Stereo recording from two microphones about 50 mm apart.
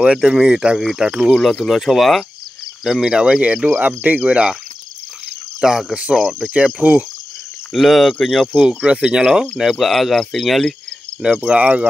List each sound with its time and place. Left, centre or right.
0.0 s speech: centre
1.3 s cricket: centre
2.8 s speech: centre; by 4.2 s right
4.2 s speech: centre
5.6 s speech: centre
6.4 s speech: centre
6.8 s speech: right
7.7 s cricket: centre
8.5 s speech: centre
9.8 s cricket: centre
11.2 s speech: centre